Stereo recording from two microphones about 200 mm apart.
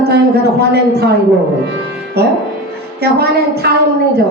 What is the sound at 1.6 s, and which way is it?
Music, 55° right (ahead or behind).